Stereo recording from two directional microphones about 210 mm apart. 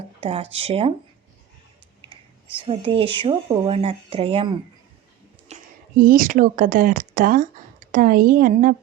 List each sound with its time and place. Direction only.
0.2 s speech: 25° right (ahead or behind)
2.6 s speech: 25° right (ahead or behind)
5.5 s a sound: 30° right (ahead or behind)
6.0 s a woman's voice: 40° right (ahead or behind)